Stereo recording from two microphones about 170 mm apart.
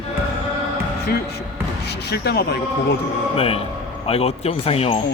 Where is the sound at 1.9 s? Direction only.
75° left (ahead or behind).